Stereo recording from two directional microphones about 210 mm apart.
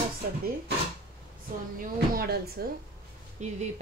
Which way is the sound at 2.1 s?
45° right (ahead or behind).